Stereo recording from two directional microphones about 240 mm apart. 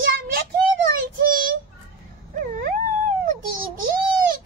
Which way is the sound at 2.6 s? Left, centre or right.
Right.